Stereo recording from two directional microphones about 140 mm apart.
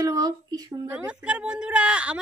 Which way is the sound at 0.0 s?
30° right (ahead or behind).